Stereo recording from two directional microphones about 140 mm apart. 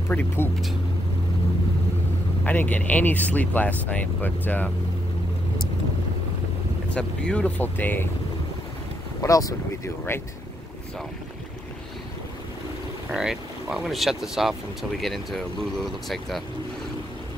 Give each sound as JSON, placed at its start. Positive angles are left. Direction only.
{"t": 0.1, "sound": "speech", "side_deg": 10}
{"t": 2.4, "sound": "speech", "side_deg": 10}
{"t": 6.9, "sound": "speech", "side_deg": 5}
{"t": 9.2, "sound": "speech", "side_deg": 25}
{"t": 13.1, "sound": "speech", "side_deg": -5}